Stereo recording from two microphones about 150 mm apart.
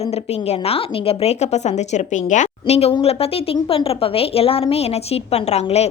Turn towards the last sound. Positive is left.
turn(degrees=45)  # may be behind; listen again after turning